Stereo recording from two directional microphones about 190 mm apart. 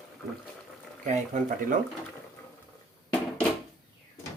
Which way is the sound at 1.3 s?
40° right (ahead or behind).